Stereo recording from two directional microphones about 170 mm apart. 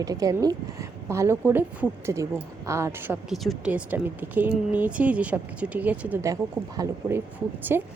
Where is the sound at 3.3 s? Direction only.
Centre (ahead or behind).